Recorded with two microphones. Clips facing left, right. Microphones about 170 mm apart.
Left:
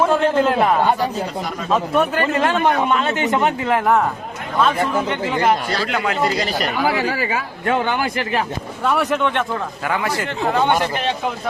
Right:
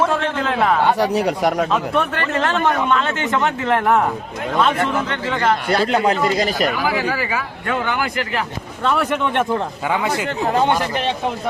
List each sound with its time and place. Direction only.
0.0 s a sound: 5° left (ahead or behind)
0.9 s speech: 75° right (ahead or behind)
1.7 s a man's voice: 5° left (ahead or behind)
2.2 s a man's voice: 20° left (ahead or behind)
5.3 s a man's voice: 20° left (ahead or behind)
5.9 s a man's voice: 35° right (ahead or behind)
6.3 s speech: 45° right (ahead or behind)
7.7 s a man's voice: 20° left (ahead or behind)
8.8 s speech: 5° left (ahead or behind)
9.9 s a man's voice: 20° right (ahead or behind)